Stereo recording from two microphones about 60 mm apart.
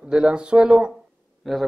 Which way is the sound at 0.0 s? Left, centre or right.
Centre.